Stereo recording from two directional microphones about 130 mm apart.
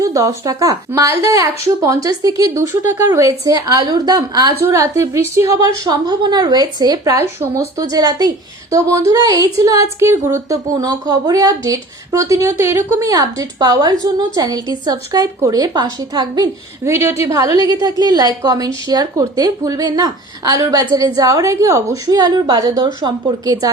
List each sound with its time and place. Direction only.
0.0 s speech: 25° right (ahead or behind)
7.8 s a woman's voice: 30° right (ahead or behind)
16.8 s speech: 20° right (ahead or behind)